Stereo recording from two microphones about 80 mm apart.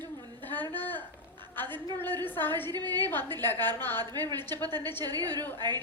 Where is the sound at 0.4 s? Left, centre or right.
Left.